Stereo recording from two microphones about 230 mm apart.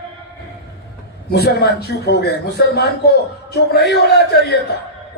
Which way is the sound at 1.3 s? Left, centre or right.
Left.